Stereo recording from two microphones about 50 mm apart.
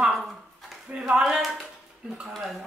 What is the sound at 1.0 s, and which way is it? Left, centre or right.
Speech, centre.